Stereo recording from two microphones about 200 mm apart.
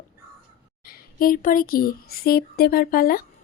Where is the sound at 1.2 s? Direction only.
45° left (ahead or behind).